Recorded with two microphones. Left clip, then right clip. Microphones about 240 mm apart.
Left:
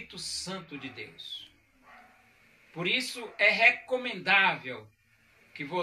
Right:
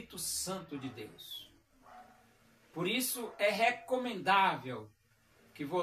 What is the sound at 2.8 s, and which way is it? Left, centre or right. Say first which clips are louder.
Speech: left 6 dB; centre.